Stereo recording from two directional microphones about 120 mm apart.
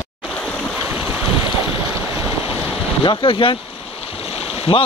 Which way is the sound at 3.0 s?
45° left (ahead or behind).